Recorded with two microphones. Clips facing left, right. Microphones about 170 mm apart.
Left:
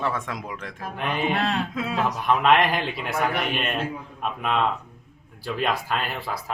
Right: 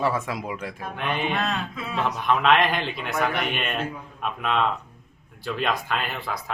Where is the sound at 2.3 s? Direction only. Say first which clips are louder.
Left 1 dB; 5° left (ahead or behind).